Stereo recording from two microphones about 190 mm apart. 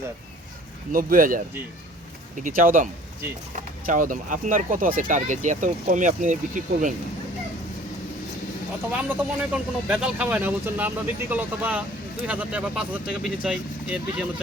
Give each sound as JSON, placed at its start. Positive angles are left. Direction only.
{"t": 0.9, "sound": "speech", "side_deg": -45}
{"t": 8.9, "sound": "speech", "side_deg": -10}